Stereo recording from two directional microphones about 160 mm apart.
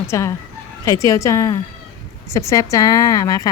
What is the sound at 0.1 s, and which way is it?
A woman's voice, 20° left (ahead or behind).